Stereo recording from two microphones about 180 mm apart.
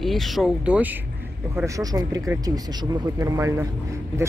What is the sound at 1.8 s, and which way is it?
Speech, 20° right (ahead or behind).